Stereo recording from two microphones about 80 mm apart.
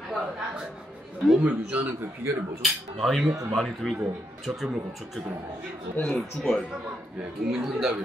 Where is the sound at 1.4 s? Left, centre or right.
Centre.